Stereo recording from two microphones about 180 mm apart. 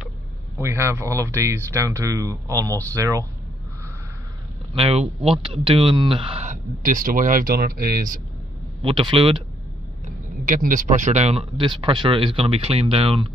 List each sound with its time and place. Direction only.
0.6 s speech: 15° right (ahead or behind)
4.7 s speech: 30° right (ahead or behind)
6.4 s speech: 45° right (ahead or behind)
8.8 s speech: 30° right (ahead or behind)
10.4 s speech: 45° right (ahead or behind)